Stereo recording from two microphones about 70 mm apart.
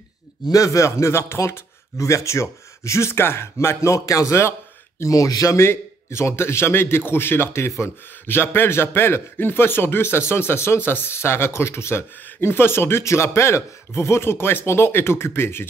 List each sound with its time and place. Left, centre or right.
0.5 s speech: left
5.1 s speech: left
5.6 s a man's voice: left